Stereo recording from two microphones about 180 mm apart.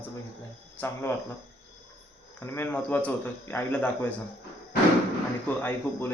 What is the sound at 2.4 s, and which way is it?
Speech, 15° left (ahead or behind).